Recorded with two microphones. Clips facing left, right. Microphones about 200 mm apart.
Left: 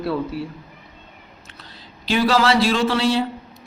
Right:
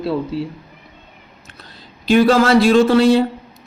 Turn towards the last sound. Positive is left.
turn(degrees=-50)  # may be behind; listen again after turning